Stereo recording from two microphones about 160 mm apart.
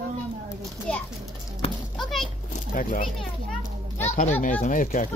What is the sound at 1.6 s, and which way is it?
Speech, 35° left (ahead or behind).